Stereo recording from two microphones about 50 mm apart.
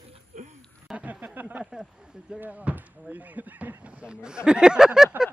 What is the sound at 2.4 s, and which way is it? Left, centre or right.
Speech, right.